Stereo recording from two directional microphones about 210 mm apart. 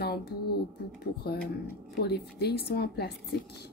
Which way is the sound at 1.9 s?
50° left (ahead or behind).